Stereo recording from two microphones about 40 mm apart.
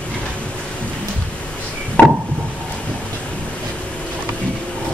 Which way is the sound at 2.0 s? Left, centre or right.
Left.